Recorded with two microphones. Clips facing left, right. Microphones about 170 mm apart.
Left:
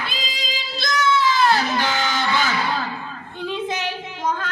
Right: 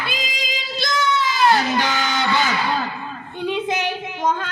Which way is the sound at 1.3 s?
20° right (ahead or behind).